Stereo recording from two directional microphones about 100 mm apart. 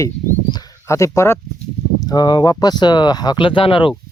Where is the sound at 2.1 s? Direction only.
40° left (ahead or behind); by 3.9 s 60° left (ahead or behind).